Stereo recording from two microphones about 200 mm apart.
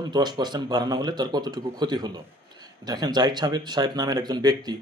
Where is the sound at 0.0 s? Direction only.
20° right (ahead or behind).